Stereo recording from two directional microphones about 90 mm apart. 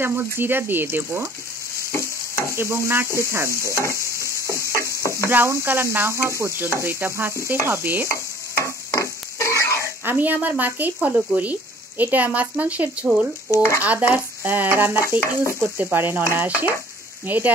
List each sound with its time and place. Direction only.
0.0 s stir: 25° right (ahead or behind)
1.9 s stir: 35° left (ahead or behind)
2.5 s stir: 30° right (ahead or behind)
3.7 s speech: 30° left (ahead or behind)
4.5 s a sound: 35° left (ahead or behind)
5.3 s stir: 30° right (ahead or behind)
8.1 s stir: 30° left (ahead or behind)
10.0 s speech: 20° right (ahead or behind)
13.6 s speech: 30° left (ahead or behind)
13.8 s stir: 20° right (ahead or behind)